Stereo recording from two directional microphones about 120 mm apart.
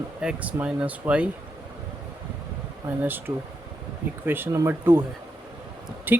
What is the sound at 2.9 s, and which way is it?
Speech, 20° right (ahead or behind).